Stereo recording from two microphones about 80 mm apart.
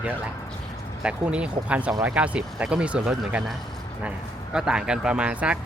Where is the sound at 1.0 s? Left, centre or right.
Centre.